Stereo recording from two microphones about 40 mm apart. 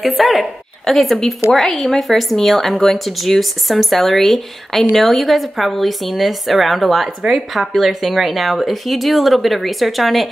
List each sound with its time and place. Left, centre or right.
0.0 s a woman's voice: centre